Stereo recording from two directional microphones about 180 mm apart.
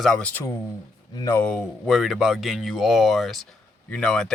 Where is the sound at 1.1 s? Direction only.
20° left (ahead or behind).